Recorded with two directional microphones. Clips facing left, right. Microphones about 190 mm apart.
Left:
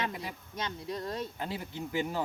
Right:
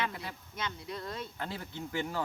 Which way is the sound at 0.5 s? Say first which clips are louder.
Left 3 dB; 35° left (ahead or behind).